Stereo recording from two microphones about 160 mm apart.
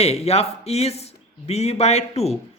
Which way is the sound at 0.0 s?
40° left (ahead or behind).